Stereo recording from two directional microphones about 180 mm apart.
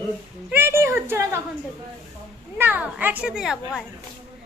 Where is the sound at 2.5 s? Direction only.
10° right (ahead or behind).